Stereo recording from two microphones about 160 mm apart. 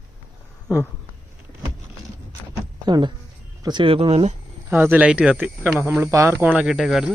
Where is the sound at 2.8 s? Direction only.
25° right (ahead or behind).